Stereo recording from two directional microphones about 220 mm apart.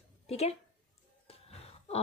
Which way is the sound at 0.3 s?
30° left (ahead or behind).